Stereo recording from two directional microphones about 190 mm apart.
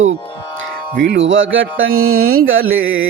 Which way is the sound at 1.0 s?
70° right (ahead or behind).